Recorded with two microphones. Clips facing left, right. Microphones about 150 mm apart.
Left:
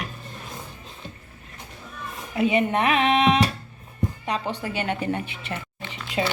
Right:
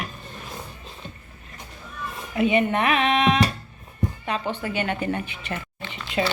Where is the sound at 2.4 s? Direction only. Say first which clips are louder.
Right 1 dB; 30° left (ahead or behind).